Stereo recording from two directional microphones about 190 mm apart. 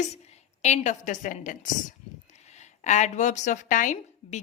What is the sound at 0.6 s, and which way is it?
A woman's voice, 40° left (ahead or behind).